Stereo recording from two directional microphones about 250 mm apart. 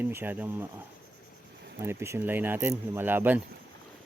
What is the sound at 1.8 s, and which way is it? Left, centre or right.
Speech, centre.